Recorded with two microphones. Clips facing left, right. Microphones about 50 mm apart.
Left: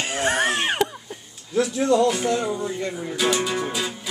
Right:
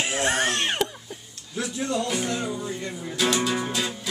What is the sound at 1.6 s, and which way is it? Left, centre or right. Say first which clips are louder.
Speech: left 9 dB; left.